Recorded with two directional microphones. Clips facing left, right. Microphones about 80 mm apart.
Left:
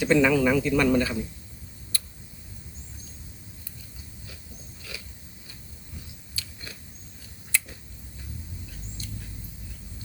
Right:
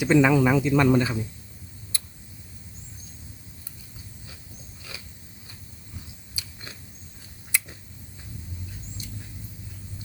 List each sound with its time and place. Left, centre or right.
0.0 s a man's voice: centre
1.9 s tick-tock: right
6.3 s biting: right
7.5 s a sound: centre
9.0 s vehicle: centre